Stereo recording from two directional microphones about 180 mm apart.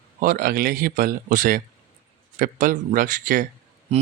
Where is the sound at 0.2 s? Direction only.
50° right (ahead or behind).